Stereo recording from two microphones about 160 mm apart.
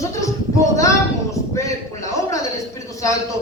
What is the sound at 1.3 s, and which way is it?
A man's voice, 20° left (ahead or behind).